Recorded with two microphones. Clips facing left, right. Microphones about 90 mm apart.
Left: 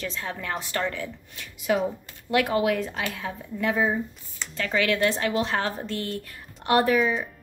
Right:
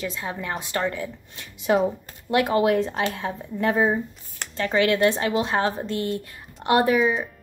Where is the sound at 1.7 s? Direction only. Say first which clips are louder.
Right 4 dB; 35° right (ahead or behind).